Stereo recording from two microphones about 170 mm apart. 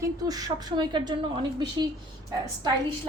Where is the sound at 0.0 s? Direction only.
20° right (ahead or behind).